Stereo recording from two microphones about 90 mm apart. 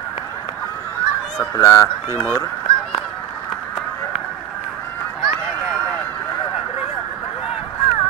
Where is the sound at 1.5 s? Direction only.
35° left (ahead or behind).